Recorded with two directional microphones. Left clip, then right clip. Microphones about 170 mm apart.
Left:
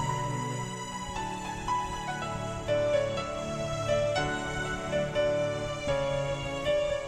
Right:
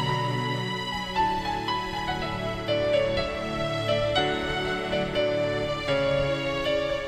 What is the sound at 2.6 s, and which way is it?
Music, 35° right (ahead or behind).